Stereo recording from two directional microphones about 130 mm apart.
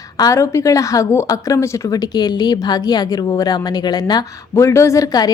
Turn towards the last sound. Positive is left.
turn(degrees=30)  # may be behind; listen again after turning